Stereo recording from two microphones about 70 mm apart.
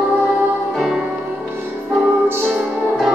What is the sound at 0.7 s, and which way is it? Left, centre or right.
Music, centre.